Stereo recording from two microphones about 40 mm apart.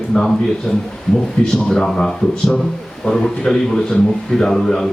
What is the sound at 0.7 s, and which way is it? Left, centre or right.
Speech, centre.